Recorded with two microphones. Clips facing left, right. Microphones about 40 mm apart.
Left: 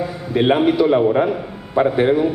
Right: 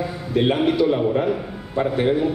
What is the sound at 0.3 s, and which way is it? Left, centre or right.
A man's voice, centre.